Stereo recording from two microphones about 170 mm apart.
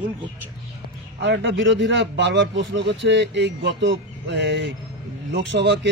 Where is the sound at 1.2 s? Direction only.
90° right.